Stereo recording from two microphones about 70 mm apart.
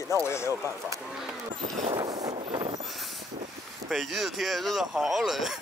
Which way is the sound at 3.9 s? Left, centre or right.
Centre.